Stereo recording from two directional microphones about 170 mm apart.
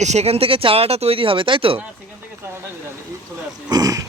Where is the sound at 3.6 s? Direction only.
20° right (ahead or behind).